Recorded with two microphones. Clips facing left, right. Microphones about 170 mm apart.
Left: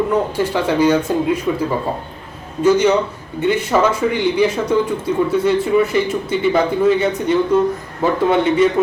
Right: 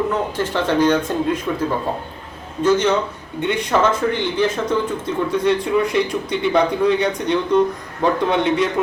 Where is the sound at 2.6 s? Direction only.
10° left (ahead or behind).